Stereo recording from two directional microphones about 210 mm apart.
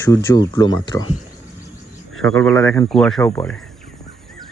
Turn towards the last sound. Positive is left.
turn(degrees=15)  # may be behind; listen again after turning